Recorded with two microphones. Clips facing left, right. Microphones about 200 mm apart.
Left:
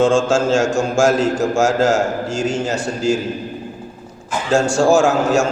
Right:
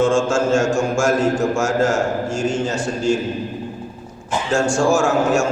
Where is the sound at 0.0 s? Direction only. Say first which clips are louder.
Left 2 dB; 75° left (ahead or behind).